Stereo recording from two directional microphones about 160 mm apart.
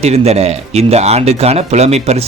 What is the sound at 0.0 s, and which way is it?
Speech, 40° right (ahead or behind).